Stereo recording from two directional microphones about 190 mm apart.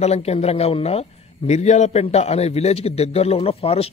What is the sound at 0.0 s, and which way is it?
A man's voice, 35° left (ahead or behind).